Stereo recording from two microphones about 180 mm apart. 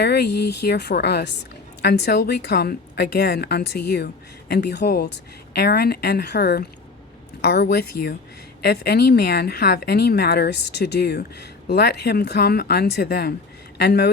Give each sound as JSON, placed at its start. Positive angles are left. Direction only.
{"t": 0.0, "sound": "a woman's voice", "side_deg": 65}